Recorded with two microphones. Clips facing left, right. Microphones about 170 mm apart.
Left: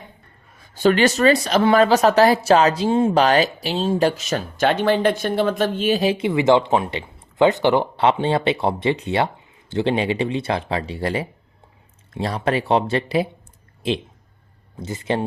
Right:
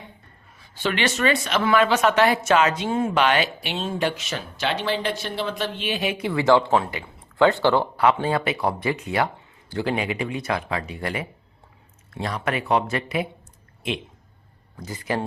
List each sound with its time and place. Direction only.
0.6 s speech: 40° left (ahead or behind)
6.2 s speech: 20° left (ahead or behind)